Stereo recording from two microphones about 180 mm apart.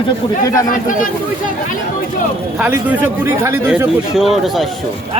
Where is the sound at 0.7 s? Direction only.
45° left (ahead or behind).